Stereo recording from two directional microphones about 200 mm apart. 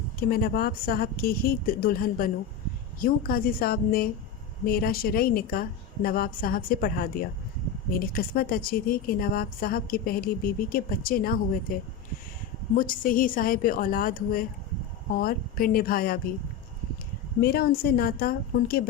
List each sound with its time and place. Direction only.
0.2 s a woman's voice: 50° left (ahead or behind)
17.4 s a woman's voice: 50° left (ahead or behind)